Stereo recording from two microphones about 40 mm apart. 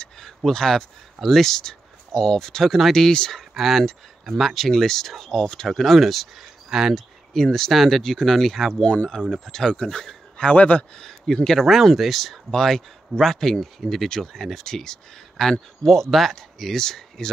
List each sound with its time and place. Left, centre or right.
0.5 s speech: centre
3.3 s speech: centre
7.3 s speech: centre
8.8 s speech: left
9.2 s speech: centre
10.4 s speech: left
11.0 s speech: centre
12.4 s speech: centre